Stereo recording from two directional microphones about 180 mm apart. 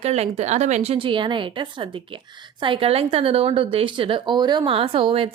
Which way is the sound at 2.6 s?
30° right (ahead or behind).